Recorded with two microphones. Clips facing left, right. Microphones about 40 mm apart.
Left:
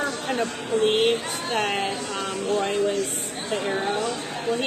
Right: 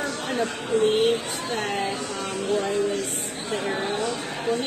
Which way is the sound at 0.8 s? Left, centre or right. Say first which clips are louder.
Left 1 dB; left.